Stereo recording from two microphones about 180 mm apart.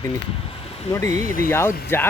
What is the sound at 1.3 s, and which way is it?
Speech, 50° left (ahead or behind).